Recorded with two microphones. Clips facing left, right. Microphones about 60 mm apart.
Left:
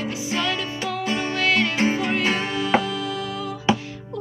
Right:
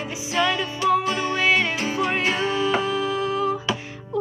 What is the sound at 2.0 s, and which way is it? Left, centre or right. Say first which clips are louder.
Music: right 1 dB; right.